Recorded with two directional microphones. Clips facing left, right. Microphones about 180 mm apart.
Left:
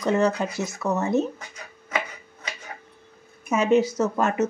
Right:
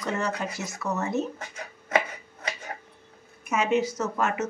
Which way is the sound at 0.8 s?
25° left (ahead or behind).